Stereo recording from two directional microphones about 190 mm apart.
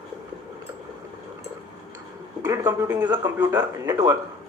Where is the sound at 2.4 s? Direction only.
15° right (ahead or behind).